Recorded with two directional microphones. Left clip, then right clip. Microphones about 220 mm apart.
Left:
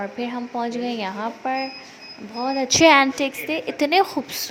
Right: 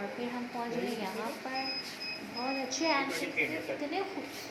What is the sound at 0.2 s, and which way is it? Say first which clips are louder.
A woman's voice: left 10 dB; 35° left (ahead or behind).